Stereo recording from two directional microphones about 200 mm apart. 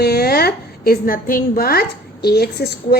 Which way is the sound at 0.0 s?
50° left (ahead or behind).